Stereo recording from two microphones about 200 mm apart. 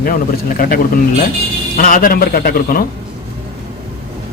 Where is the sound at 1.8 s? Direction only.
45° left (ahead or behind).